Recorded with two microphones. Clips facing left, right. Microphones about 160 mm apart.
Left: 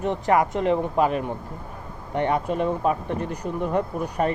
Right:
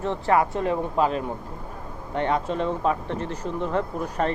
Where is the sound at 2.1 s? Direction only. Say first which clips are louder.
Left 1 dB; 15° left (ahead or behind).